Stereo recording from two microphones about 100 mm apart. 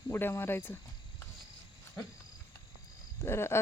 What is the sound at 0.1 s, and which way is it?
Speech, 25° left (ahead or behind).